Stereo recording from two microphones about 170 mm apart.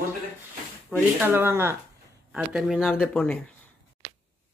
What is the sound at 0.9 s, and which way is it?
Speech, 10° right (ahead or behind).